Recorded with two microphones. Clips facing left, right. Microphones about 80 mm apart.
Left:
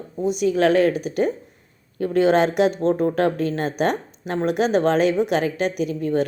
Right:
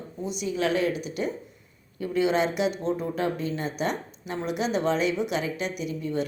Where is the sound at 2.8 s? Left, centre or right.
Left.